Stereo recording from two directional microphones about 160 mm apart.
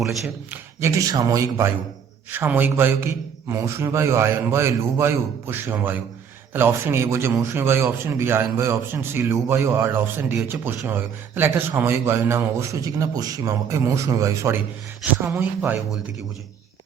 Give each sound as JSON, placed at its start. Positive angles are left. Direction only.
{"t": 0.0, "sound": "a man's voice", "side_deg": 0}
{"t": 0.8, "sound": "speech", "side_deg": -20}